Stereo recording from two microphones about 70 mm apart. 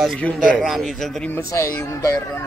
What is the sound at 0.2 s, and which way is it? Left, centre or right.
Speech, centre.